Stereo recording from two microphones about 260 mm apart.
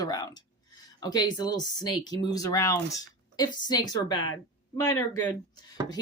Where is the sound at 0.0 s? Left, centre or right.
Centre.